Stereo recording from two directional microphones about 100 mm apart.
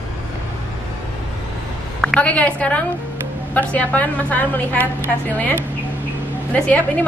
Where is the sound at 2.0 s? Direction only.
10° left (ahead or behind).